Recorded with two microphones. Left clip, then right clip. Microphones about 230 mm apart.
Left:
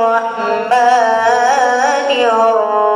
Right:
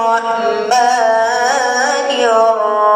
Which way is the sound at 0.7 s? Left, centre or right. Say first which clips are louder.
Left 2 dB; right.